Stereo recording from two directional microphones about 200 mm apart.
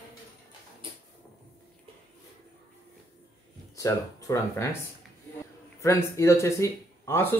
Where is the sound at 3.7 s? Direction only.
15° left (ahead or behind).